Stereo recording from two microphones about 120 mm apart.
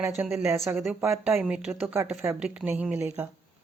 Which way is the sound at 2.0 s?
20° right (ahead or behind).